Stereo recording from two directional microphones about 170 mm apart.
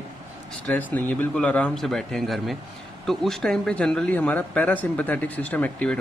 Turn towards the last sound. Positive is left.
turn(degrees=10)  # may be behind; listen again after turning